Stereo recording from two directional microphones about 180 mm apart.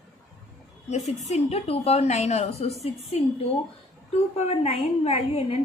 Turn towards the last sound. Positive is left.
turn(degrees=35)  # may be behind; listen again after turning